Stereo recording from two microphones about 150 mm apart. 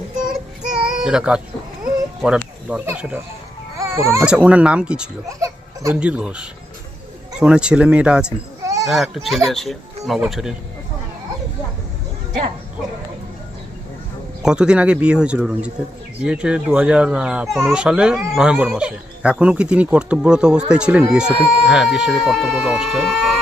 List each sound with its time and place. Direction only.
0.3 s child singing: 5° right (ahead or behind)
1.8 s a sound: 5° right (ahead or behind)
2.6 s speech: 10° right (ahead or behind)
4.3 s speech: 5° right (ahead or behind)
8.6 s a sound: 20° right (ahead or behind)
8.9 s speech: centre (ahead or behind)
14.4 s speech: 5° right (ahead or behind)